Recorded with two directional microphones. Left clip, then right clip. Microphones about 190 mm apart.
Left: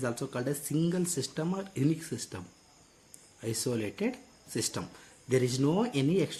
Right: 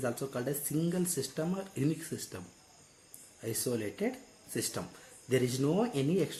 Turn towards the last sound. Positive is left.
turn(degrees=50)  # may be behind; listen again after turning